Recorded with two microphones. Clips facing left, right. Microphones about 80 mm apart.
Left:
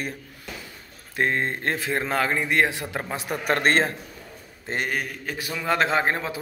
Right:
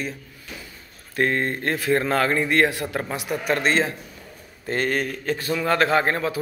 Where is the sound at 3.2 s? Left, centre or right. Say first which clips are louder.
Left 1 dB; left.